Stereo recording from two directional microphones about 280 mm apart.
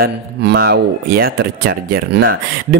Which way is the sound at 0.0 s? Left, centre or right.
Right.